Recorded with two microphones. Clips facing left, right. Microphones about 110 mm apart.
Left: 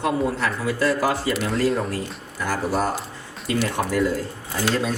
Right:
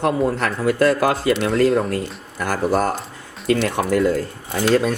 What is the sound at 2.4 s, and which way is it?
Speech, 55° right (ahead or behind).